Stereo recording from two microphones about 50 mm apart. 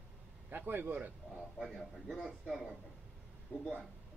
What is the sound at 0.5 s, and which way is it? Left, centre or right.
Speech, right.